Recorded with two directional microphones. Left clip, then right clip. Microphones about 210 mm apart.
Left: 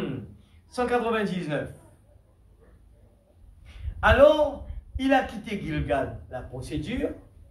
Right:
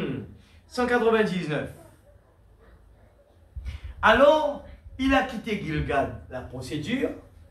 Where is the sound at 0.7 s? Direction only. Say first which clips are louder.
Right 3 dB; 55° left (ahead or behind).